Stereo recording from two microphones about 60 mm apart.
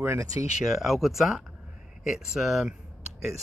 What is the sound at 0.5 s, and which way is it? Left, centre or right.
Speech, centre.